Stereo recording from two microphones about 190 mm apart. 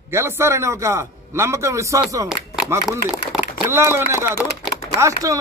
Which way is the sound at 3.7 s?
15° right (ahead or behind).